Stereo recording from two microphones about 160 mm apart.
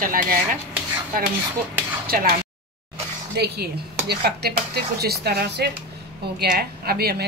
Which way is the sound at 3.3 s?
90° right.